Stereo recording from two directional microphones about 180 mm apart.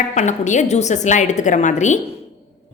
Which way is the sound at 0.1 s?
40° left (ahead or behind).